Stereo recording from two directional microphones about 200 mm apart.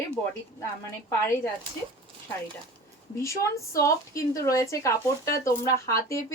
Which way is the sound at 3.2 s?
15° left (ahead or behind).